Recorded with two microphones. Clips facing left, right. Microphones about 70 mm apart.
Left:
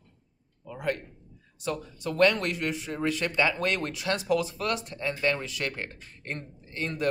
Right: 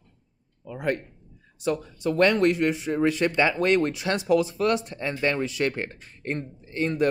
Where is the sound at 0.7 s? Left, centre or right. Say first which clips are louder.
Right 3 dB; right.